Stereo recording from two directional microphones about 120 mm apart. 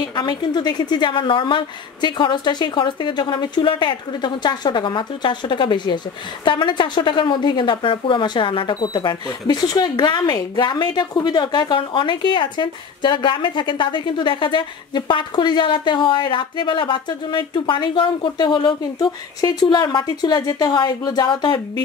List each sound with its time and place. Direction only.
0.1 s a woman's voice: 35° left (ahead or behind)